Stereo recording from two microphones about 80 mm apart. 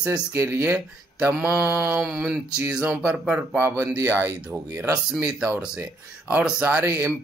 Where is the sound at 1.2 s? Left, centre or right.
Centre.